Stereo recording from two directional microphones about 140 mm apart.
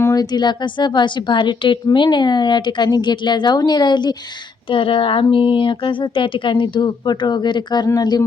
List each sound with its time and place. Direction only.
0.0 s a woman's voice: 25° left (ahead or behind)